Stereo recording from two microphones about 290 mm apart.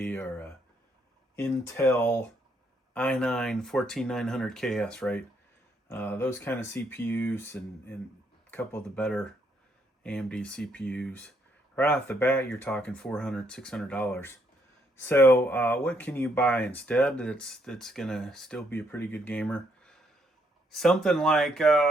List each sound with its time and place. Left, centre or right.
0.0 s speech: centre